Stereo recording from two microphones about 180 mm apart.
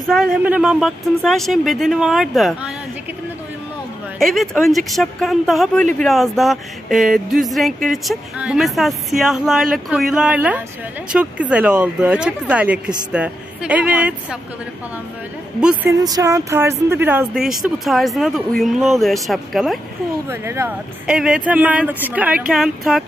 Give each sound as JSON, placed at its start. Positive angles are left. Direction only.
{"t": 0.1, "sound": "speech", "side_deg": -5}
{"t": 4.2, "sound": "speech", "side_deg": 0}
{"t": 15.8, "sound": "speech", "side_deg": -20}
{"t": 20.2, "sound": "speech", "side_deg": -15}